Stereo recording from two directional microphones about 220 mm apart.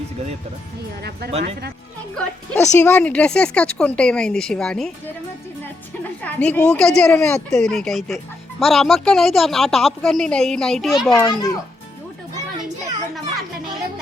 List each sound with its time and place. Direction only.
1.3 s speech: 30° right (ahead or behind)
2.1 s speech: 5° left (ahead or behind)
6.2 s speech: 5° left (ahead or behind)
11.2 s a child's voice: 15° left (ahead or behind)